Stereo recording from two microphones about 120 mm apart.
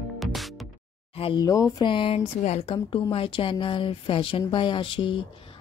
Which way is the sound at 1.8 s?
45° left (ahead or behind).